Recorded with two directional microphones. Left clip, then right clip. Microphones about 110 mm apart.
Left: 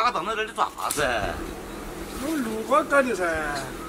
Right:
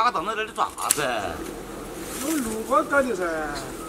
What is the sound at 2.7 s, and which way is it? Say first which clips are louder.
Speech: left 1 dB; 15° left (ahead or behind).